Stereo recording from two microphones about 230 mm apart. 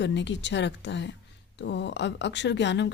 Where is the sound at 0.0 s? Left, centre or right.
Left.